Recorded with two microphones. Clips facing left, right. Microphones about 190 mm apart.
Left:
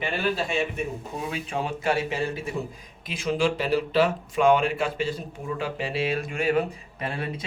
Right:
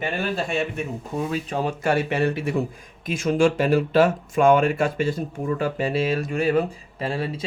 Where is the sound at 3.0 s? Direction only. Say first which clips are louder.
Right 5 dB; 45° right (ahead or behind).